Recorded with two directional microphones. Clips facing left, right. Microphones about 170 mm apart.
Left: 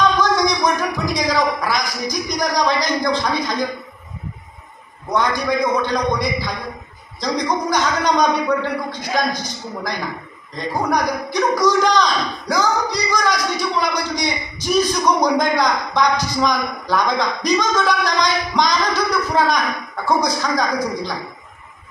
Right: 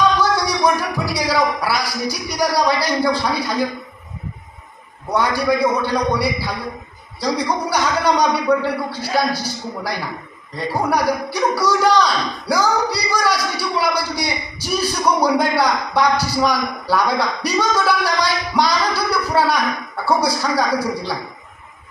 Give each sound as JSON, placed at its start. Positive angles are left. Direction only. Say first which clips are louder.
{"t": 0.7, "sound": "speech", "louder": "left 1 dB", "side_deg": -10}
{"t": 5.1, "sound": "a man's voice", "louder": "right 1 dB", "side_deg": -10}